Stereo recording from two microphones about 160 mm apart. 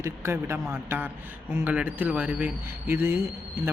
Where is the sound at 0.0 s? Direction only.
15° right (ahead or behind).